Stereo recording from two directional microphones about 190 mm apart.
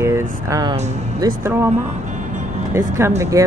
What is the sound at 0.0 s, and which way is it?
Speech, 15° right (ahead or behind).